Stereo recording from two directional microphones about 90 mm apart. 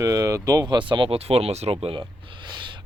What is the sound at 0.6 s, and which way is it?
Speech, 60° right (ahead or behind).